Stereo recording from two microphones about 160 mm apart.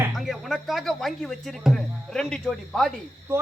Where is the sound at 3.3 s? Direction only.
15° right (ahead or behind).